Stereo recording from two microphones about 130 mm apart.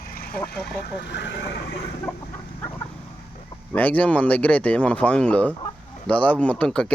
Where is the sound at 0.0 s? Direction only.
90° left.